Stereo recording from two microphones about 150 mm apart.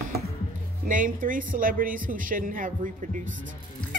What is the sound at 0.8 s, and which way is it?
A woman's voice, 60° right (ahead or behind).